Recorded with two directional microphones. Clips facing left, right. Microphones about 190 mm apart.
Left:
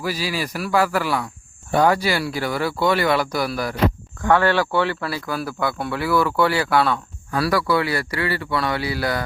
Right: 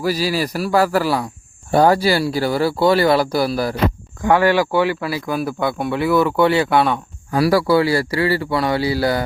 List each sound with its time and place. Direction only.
0.0 s speech: 40° right (ahead or behind)
4.2 s speech: 15° right (ahead or behind); by 9.2 s 30° right (ahead or behind)